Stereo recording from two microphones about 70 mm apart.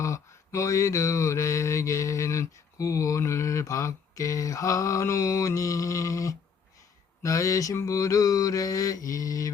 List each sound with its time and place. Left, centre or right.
0.0 s mantra: left